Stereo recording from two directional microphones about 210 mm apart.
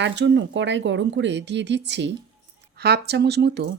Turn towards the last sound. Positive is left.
turn(degrees=-50)  # may be behind; listen again after turning